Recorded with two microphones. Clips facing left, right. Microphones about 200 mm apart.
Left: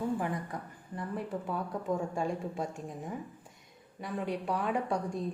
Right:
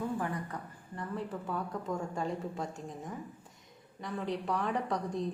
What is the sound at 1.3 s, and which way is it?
Speech, 30° left (ahead or behind).